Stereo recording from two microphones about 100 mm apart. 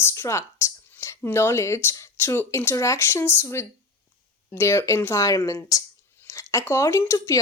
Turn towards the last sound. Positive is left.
turn(degrees=30)  # may be behind; listen again after turning